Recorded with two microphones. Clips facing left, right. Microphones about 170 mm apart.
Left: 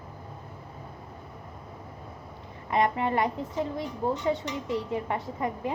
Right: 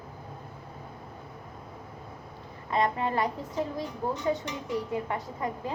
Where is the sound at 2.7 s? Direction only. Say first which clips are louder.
Left 2 dB; 20° left (ahead or behind).